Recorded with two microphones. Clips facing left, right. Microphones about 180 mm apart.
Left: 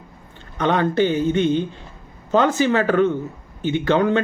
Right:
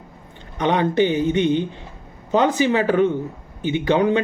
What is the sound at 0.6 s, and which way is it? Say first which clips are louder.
A man's voice: even; 15° right (ahead or behind).